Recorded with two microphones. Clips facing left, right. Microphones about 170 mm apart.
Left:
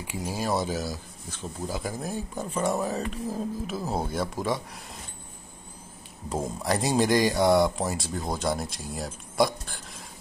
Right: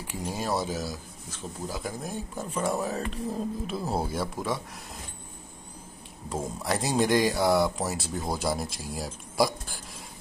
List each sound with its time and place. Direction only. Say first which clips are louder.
0.0 s speech: left 2 dB; 10° left (ahead or behind)
6.2 s speech: left 2 dB; centre (ahead or behind)